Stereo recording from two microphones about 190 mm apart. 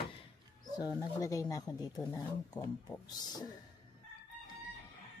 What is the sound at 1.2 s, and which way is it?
A man's voice, 15° left (ahead or behind).